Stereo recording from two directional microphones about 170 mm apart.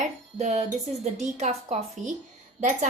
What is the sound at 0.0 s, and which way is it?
Music, 45° right (ahead or behind).